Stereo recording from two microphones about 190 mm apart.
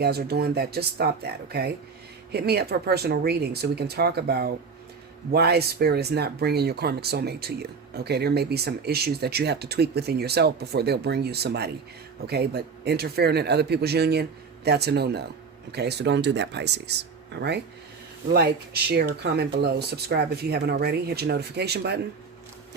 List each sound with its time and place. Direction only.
0.0 s speech: 55° right (ahead or behind)